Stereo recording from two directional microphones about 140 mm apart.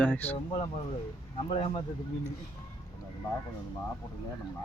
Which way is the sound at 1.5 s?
45° left (ahead or behind).